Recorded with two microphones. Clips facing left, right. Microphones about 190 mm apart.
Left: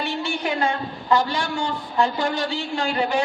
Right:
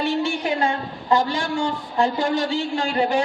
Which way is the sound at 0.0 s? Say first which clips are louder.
Right 5 dB; 50° right (ahead or behind).